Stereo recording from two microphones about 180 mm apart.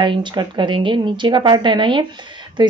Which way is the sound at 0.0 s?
25° right (ahead or behind).